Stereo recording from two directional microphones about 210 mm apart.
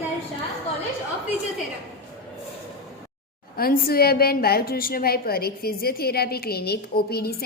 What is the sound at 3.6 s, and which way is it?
A woman's voice, 45° left (ahead or behind).